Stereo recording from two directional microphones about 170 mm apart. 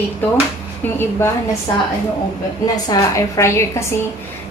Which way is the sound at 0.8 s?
15° left (ahead or behind).